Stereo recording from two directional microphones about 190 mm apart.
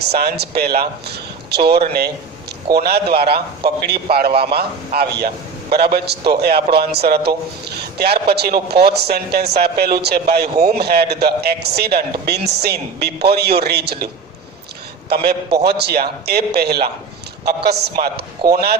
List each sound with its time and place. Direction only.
0.1 s a man's voice: 55° right (ahead or behind)
15.1 s a man's voice: 55° right (ahead or behind)